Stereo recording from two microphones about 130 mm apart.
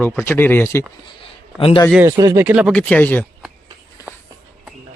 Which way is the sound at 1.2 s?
45° left (ahead or behind).